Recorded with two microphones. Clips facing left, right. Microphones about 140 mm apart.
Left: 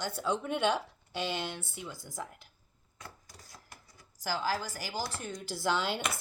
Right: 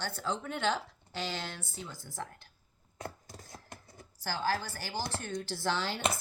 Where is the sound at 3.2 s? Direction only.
25° right (ahead or behind).